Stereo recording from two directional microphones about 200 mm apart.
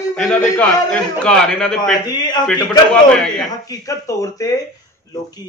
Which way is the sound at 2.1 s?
20° left (ahead or behind).